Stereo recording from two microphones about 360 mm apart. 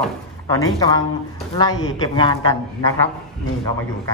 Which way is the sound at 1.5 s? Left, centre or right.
Centre.